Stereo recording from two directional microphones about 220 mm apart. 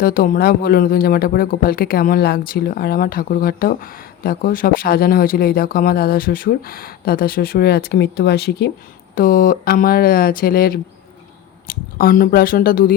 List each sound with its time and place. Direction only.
0.0 s speech: 45° left (ahead or behind)
11.9 s speech: 40° left (ahead or behind)